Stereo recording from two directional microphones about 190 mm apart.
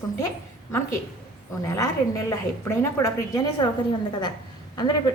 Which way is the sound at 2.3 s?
15° left (ahead or behind).